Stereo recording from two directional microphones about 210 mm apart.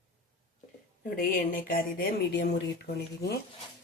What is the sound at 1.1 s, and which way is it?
Speech, 45° left (ahead or behind).